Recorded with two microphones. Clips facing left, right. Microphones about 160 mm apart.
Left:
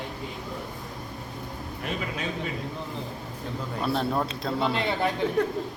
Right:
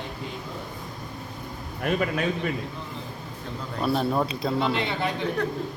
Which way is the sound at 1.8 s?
55° right (ahead or behind).